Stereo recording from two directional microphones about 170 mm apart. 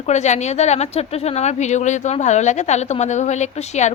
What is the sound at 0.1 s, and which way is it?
A woman's voice, 40° left (ahead or behind).